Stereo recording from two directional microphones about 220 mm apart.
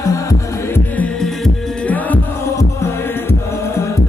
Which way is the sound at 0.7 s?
5° left (ahead or behind).